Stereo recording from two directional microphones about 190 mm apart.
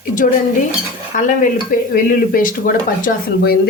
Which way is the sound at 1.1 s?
40° left (ahead or behind).